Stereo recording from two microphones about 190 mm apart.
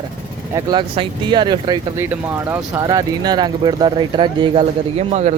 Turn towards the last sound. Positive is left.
turn(degrees=-35)  # may be behind; listen again after turning